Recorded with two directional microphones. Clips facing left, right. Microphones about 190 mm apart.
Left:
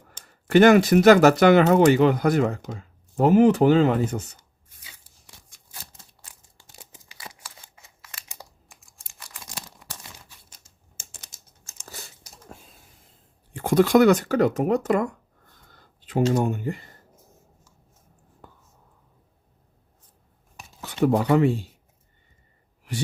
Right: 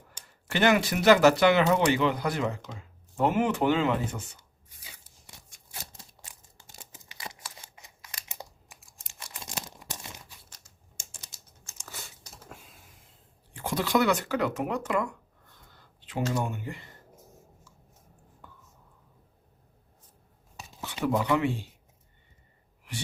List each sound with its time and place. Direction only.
0.5 s speech: 45° left (ahead or behind)
9.0 s tearing: 25° right (ahead or behind)
9.6 s crumpling: 20° right (ahead or behind)
13.6 s speech: 50° left (ahead or behind)
15.7 s a sound: 45° left (ahead or behind)
16.3 s speech: 45° left (ahead or behind)
20.8 s speech: 45° left (ahead or behind)